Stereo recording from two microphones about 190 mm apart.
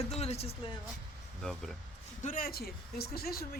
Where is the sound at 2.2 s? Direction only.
45° left (ahead or behind).